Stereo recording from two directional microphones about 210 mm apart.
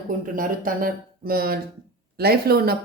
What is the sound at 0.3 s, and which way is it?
Speech, 40° right (ahead or behind).